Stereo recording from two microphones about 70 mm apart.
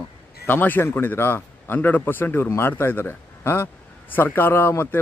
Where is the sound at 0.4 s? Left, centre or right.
Left.